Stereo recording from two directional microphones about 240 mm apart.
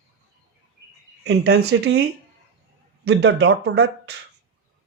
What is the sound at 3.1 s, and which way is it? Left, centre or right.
Speech, right.